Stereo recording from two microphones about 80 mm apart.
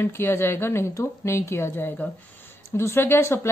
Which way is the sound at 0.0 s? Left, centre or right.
Left.